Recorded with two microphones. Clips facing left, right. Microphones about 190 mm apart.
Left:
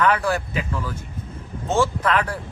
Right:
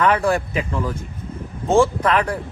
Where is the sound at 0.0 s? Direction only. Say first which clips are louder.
Right 3 dB; 30° right (ahead or behind).